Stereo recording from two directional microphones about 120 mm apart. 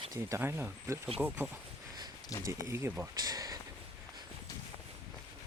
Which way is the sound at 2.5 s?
25° right (ahead or behind).